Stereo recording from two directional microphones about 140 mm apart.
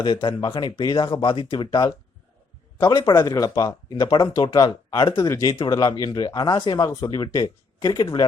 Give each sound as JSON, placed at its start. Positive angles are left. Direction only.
{"t": 0.0, "sound": "speech", "side_deg": 35}